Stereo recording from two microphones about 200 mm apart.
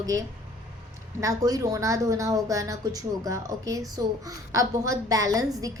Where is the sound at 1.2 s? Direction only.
15° right (ahead or behind).